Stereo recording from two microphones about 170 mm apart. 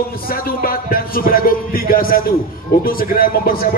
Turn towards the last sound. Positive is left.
turn(degrees=60)  # may be behind; listen again after turning